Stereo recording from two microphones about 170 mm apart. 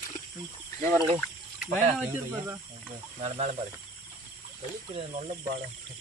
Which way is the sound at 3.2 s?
40° right (ahead or behind).